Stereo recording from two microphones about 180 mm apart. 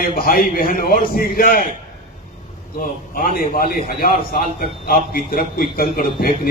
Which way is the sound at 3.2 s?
55° left (ahead or behind).